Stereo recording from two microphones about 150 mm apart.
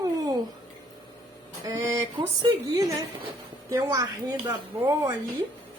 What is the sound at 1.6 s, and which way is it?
Speech, 25° right (ahead or behind).